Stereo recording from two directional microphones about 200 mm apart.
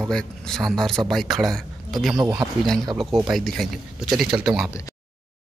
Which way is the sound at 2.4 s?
20° right (ahead or behind).